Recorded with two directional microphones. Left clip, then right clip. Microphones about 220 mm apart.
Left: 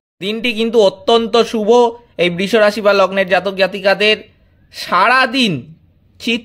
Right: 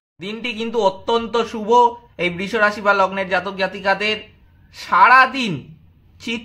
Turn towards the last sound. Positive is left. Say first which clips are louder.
# left 8 dB
turn(degrees=40)  # may be behind; listen again after turning